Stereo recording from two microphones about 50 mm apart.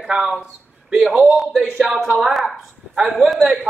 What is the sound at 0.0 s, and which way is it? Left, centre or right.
A man's voice, centre.